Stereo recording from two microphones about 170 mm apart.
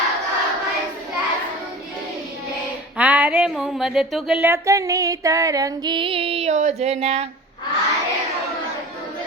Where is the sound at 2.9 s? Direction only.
5° right (ahead or behind); by 7.3 s 35° right (ahead or behind).